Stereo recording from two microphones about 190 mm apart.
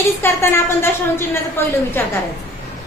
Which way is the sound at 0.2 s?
10° left (ahead or behind).